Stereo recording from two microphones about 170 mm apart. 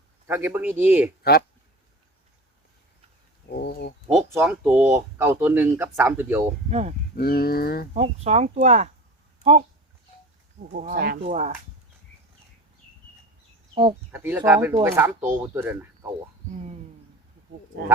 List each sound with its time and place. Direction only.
0.3 s speech: 15° right (ahead or behind)
1.2 s speech: 65° left (ahead or behind)
3.5 s a sound: 70° left (ahead or behind)
4.3 s speech: 10° right (ahead or behind)
6.7 s speech: 40° right (ahead or behind)
7.2 s speech: 65° left (ahead or behind)
7.9 s speech: 40° right (ahead or behind)
10.7 s speech: 55° right (ahead or behind)
11.3 s speech: 40° right (ahead or behind)
14.1 s speech: 10° right (ahead or behind)
16.5 s speech: 40° right (ahead or behind)